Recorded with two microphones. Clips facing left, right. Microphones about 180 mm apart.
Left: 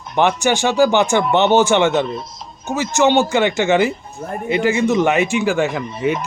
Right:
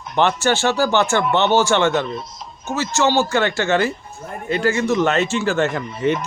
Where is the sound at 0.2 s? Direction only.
15° left (ahead or behind).